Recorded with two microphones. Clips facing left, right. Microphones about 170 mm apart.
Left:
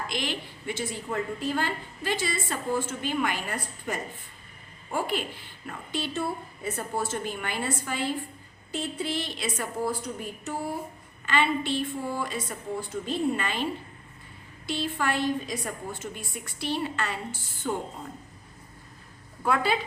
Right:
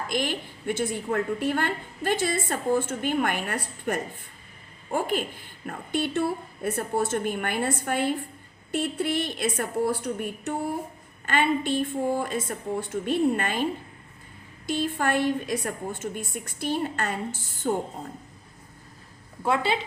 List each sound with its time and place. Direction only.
0.1 s a woman's voice: 50° right (ahead or behind)
4.9 s a woman's voice: 45° right (ahead or behind)
11.3 s a woman's voice: 50° right (ahead or behind)
14.7 s a woman's voice: 50° right (ahead or behind)
19.4 s a woman's voice: 25° right (ahead or behind)